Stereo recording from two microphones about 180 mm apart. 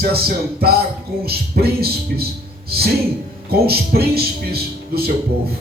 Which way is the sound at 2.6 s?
60° right (ahead or behind).